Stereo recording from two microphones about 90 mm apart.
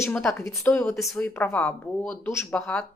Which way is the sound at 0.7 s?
30° left (ahead or behind).